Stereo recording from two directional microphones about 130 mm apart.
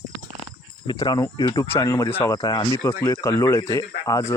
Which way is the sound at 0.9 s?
30° left (ahead or behind).